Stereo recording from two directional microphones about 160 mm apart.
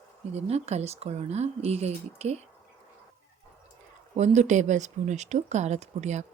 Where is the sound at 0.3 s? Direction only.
40° right (ahead or behind).